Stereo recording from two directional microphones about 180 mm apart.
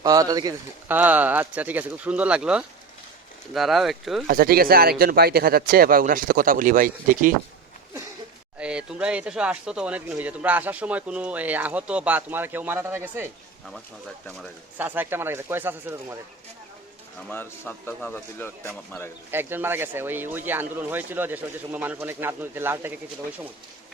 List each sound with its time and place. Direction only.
0.0 s a man's voice: 20° right (ahead or behind)
0.9 s speech: 10° right (ahead or behind)
4.3 s speech: 55° right (ahead or behind)
8.5 s speech: 5° right (ahead or behind)
14.8 s speech: 10° right (ahead or behind)
17.2 s speech: 10° left (ahead or behind)
19.3 s speech: 10° right (ahead or behind)